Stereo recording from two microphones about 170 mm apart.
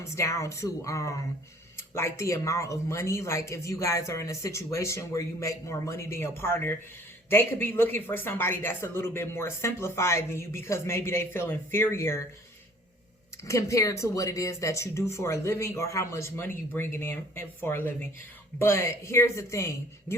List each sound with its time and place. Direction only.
0.0 s speech: 15° left (ahead or behind)
13.5 s speech: 20° left (ahead or behind)